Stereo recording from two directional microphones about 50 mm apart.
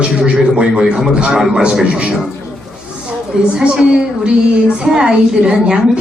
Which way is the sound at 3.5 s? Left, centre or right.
Centre.